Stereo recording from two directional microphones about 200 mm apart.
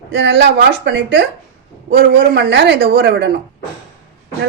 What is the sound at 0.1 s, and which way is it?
A man's voice, 60° right (ahead or behind).